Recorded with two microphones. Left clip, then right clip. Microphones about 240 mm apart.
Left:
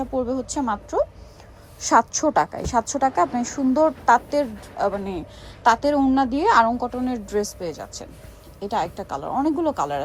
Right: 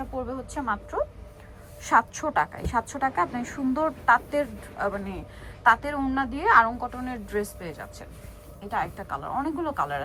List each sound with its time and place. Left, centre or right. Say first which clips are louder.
0.5 s a woman's voice: left 4 dB; left